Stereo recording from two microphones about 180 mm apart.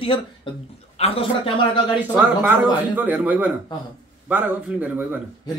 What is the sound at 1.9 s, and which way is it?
Speech, 10° right (ahead or behind).